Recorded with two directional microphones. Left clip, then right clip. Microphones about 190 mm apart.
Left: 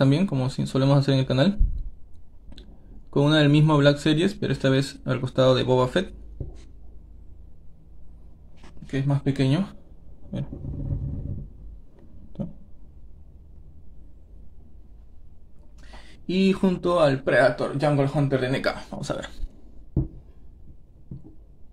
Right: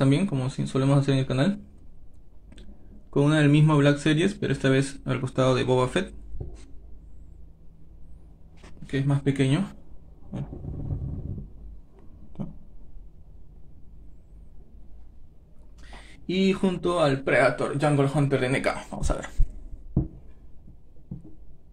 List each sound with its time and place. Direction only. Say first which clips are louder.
0.0 s speech: left 2 dB; 20° left (ahead or behind)
3.1 s a man's voice: left 2 dB; 15° left (ahead or behind)
8.8 s a man's voice: even; 10° left (ahead or behind)
16.3 s a man's voice: left 2 dB; 20° left (ahead or behind)